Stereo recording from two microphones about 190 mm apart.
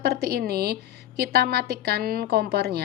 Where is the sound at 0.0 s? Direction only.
60° right (ahead or behind).